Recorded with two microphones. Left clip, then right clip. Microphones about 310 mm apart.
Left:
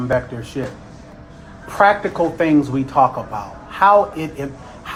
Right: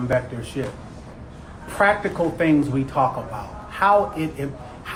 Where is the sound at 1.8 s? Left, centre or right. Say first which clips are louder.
Left 5 dB; left.